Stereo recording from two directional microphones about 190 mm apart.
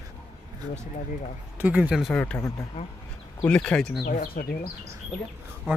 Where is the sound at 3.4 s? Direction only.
5° left (ahead or behind).